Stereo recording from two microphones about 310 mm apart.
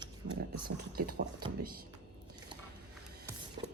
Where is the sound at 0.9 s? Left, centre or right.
Right.